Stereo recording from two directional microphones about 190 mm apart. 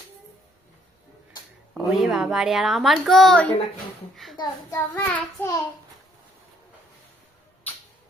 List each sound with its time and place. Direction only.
1.9 s a woman's voice: centre (ahead or behind); by 5.6 s 15° left (ahead or behind)